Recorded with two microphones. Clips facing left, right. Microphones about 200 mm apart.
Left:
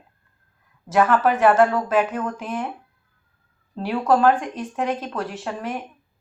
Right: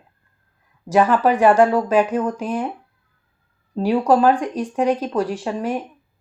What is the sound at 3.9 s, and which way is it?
Speech, 15° right (ahead or behind).